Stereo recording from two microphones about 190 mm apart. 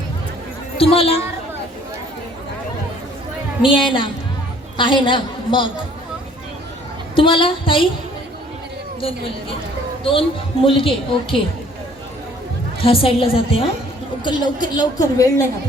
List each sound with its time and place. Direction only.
0.8 s a woman's voice: 30° left (ahead or behind)
3.6 s a woman's voice: 25° left (ahead or behind)
7.2 s a woman's voice: 25° left (ahead or behind)
9.0 s a woman's voice: 30° left (ahead or behind)
12.8 s a woman's voice: 30° left (ahead or behind)